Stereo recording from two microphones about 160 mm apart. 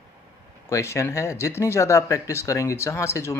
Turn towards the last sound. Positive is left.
turn(degrees=15)  # may be behind; listen again after turning